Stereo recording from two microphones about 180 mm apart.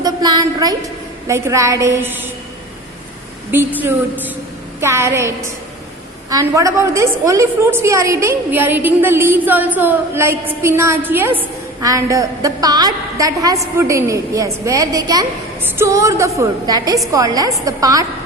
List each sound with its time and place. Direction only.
0.0 s a sound: 20° right (ahead or behind)
1.3 s a woman's voice: 15° right (ahead or behind)
3.5 s a woman's voice: 10° right (ahead or behind)